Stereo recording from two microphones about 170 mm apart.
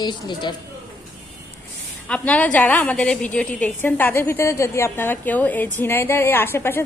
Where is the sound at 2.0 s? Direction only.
5° left (ahead or behind).